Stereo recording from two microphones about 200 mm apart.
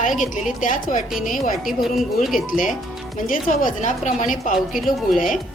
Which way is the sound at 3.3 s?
40° left (ahead or behind).